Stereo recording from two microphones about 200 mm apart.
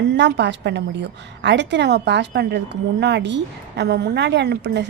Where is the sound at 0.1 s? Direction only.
60° right (ahead or behind).